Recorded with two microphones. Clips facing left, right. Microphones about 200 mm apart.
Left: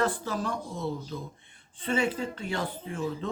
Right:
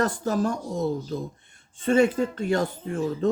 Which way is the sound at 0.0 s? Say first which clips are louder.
Right 5 dB; 45° right (ahead or behind).